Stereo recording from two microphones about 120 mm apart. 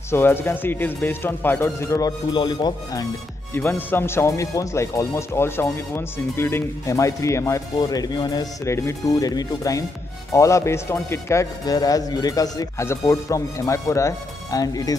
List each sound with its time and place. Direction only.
0.1 s speech: 20° left (ahead or behind); by 3.1 s 35° left (ahead or behind)
3.5 s speech: 15° left (ahead or behind)